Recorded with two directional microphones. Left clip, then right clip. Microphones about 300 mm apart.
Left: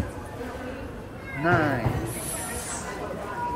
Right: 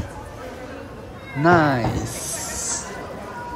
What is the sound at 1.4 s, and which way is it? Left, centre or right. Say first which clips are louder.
Speech: right 7 dB; left.